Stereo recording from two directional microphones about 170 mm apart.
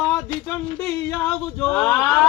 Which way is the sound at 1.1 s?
5° left (ahead or behind).